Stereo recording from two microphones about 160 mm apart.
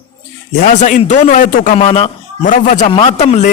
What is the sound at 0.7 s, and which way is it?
A man's voice, 50° left (ahead or behind).